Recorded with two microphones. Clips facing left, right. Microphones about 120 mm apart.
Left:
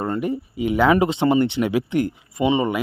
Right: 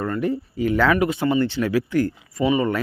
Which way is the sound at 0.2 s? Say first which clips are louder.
Right 1 dB; 15° left (ahead or behind).